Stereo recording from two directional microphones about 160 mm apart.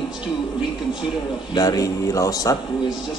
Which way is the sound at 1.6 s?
25° left (ahead or behind).